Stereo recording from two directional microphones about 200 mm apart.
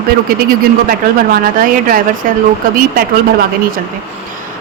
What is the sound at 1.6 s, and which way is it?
Speech, 45° right (ahead or behind).